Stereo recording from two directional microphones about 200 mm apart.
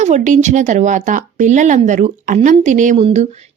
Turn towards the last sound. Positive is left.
turn(degrees=-30)  # may be behind; listen again after turning